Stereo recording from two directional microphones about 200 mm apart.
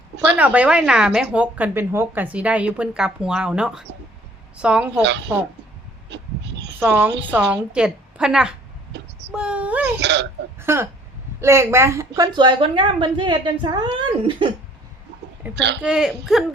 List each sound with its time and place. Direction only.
0.3 s a woman's voice: 5° right (ahead or behind)
6.1 s speech: 60° right (ahead or behind)
6.7 s a woman's voice: 5° right (ahead or behind)
10.0 s speech: 60° right (ahead or behind)
10.6 s a child's voice: 10° right (ahead or behind)
15.5 s speech: 60° right (ahead or behind)
15.8 s a woman's voice: 5° right (ahead or behind)